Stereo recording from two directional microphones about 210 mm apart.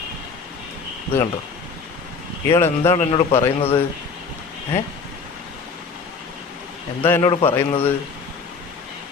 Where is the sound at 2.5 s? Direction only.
15° left (ahead or behind).